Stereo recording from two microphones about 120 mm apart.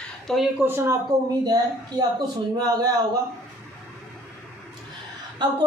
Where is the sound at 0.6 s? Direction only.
20° right (ahead or behind).